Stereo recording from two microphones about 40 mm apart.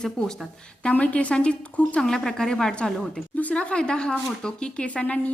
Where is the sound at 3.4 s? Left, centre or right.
Left.